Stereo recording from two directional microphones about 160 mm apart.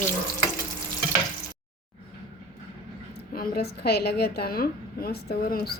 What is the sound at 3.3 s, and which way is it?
A woman's voice, 70° left (ahead or behind).